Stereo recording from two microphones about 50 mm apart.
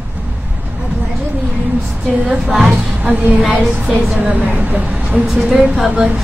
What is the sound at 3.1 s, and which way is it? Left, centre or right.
Speech, right.